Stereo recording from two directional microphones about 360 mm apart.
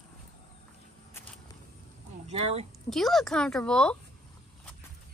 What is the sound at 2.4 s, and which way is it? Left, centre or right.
Speech, centre.